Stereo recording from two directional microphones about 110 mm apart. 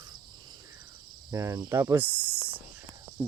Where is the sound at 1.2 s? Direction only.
30° right (ahead or behind).